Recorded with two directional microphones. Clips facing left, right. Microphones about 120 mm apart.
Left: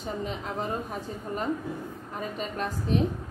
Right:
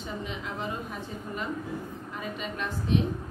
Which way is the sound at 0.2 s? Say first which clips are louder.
Left 3 dB; 40° left (ahead or behind).